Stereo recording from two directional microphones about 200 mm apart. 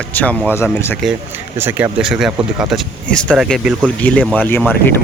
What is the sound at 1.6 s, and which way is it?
Speech, 10° right (ahead or behind).